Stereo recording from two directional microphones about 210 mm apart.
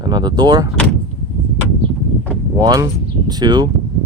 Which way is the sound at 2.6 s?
15° right (ahead or behind).